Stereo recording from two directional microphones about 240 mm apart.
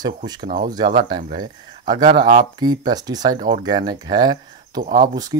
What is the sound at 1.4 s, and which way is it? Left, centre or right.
Speech, centre.